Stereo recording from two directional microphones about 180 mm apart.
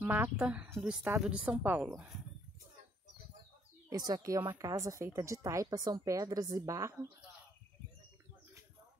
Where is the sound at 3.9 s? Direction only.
20° right (ahead or behind).